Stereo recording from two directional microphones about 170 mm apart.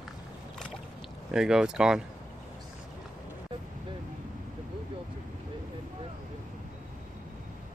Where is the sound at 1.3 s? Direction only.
5° right (ahead or behind).